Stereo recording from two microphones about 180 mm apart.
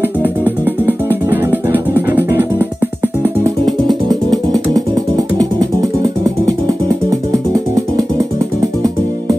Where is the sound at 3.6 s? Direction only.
20° right (ahead or behind).